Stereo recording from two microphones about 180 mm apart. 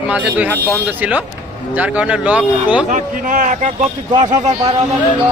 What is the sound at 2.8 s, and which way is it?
A man's voice, 45° right (ahead or behind).